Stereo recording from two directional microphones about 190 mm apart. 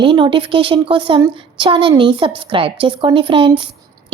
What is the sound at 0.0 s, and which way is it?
A woman's voice, 25° right (ahead or behind).